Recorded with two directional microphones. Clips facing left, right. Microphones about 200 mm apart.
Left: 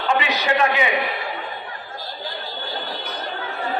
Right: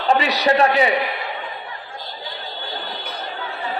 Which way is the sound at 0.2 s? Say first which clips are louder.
Right 3 dB; 35° right (ahead or behind).